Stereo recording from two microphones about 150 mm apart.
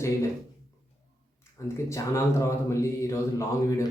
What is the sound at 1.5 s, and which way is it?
Speech, 20° left (ahead or behind).